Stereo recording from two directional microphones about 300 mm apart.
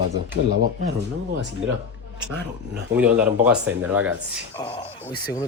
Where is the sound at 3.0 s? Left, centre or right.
Centre.